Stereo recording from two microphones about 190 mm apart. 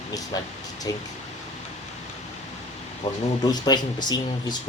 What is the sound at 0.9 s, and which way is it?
Speech, 20° left (ahead or behind).